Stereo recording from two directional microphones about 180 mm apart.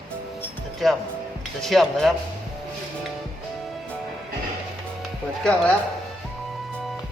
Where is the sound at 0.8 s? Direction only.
Centre (ahead or behind).